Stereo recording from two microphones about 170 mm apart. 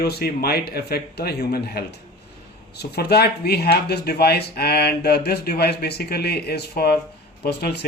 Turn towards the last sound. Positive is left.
turn(degrees=70)  # may be behind; listen again after turning